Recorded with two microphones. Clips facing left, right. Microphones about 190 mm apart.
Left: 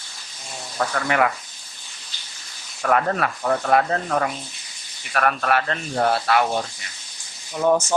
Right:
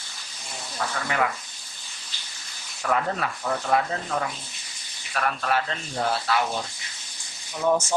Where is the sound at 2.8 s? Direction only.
65° left (ahead or behind).